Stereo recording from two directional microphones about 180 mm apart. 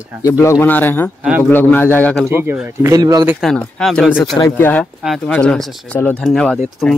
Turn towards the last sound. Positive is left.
turn(degrees=0)  # may be behind; listen again after turning